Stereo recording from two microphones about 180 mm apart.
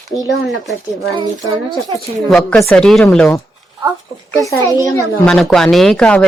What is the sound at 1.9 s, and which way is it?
Speech, centre (ahead or behind).